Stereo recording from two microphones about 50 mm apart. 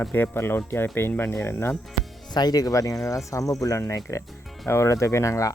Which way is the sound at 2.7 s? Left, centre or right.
Left.